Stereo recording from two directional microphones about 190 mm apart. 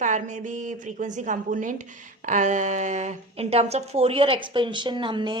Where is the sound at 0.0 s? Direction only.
40° right (ahead or behind).